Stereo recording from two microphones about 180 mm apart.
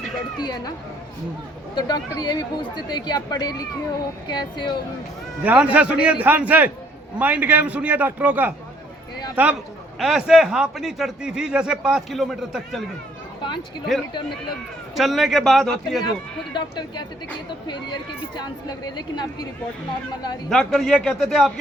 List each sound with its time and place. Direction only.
0.3 s speech: 25° left (ahead or behind)
2.2 s speech: 25° left (ahead or behind)
5.4 s a man's voice: 10° right (ahead or behind)
13.4 s a sound: 25° left (ahead or behind)
13.9 s a man's voice: centre (ahead or behind)
16.6 s speech: 25° left (ahead or behind)
20.5 s a man's voice: centre (ahead or behind)